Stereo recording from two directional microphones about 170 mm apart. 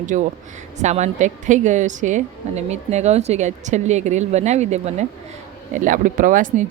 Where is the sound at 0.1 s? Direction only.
50° right (ahead or behind).